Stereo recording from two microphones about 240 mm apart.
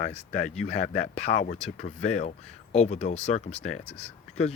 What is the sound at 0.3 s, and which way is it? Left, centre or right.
Speech, left.